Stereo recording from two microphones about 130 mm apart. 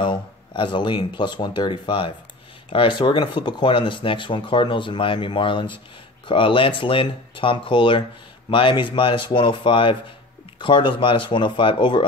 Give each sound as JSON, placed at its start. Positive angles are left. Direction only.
{"t": 0.0, "sound": "speech", "side_deg": 35}